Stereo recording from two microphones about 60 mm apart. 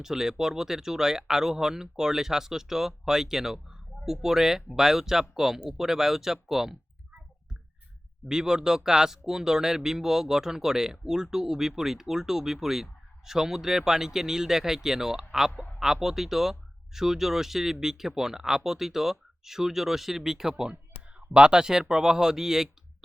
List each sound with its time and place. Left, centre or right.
0.0 s speech: centre
8.3 s speech: centre